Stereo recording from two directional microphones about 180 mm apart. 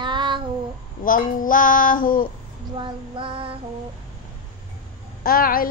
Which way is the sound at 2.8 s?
30° right (ahead or behind).